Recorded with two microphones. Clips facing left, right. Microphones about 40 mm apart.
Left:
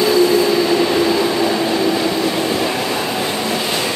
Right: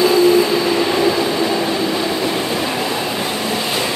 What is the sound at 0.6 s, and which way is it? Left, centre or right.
Train, centre.